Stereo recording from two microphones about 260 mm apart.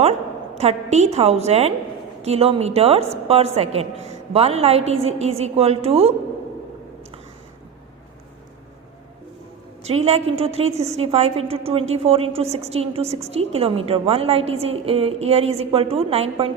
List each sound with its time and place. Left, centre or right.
0.6 s a woman's voice: right
9.8 s a woman's voice: right